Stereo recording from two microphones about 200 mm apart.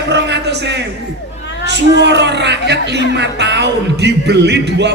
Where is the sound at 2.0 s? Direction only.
60° right (ahead or behind).